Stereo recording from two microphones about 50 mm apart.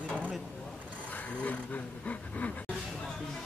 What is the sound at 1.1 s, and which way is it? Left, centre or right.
Speech, left.